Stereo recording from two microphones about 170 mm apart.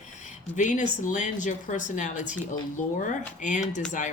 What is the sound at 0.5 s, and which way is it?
A woman's voice, 45° left (ahead or behind).